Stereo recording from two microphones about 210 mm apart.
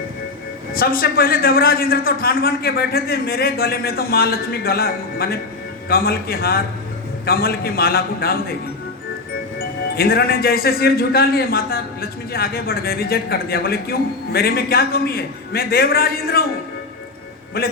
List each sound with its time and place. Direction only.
0.7 s a man's voice: 45° left (ahead or behind)
9.6 s a man's voice: 45° left (ahead or behind)
17.6 s a man's voice: 45° left (ahead or behind)